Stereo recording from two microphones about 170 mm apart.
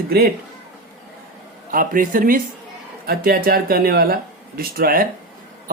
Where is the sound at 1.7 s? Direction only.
55° right (ahead or behind).